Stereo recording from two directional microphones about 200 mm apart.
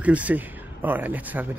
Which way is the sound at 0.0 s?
5° right (ahead or behind).